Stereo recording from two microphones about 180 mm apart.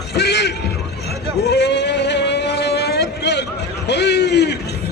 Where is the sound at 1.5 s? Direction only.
70° left (ahead or behind).